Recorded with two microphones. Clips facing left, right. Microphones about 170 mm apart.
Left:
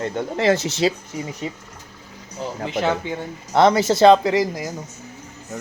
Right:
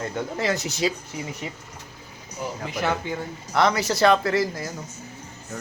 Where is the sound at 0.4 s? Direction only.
30° left (ahead or behind).